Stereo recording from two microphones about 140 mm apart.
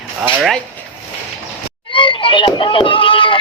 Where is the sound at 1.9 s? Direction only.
35° left (ahead or behind).